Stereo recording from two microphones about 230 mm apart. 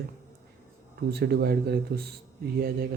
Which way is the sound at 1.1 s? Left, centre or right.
Right.